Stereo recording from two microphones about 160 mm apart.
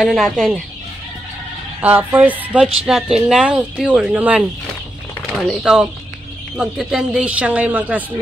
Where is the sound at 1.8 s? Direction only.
10° right (ahead or behind).